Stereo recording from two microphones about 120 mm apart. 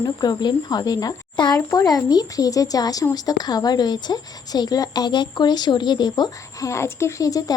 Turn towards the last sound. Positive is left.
turn(degrees=30)  # may be behind; listen again after turning